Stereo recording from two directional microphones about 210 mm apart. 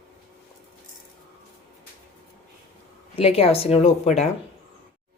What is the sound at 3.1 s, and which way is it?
Speech, 30° left (ahead or behind).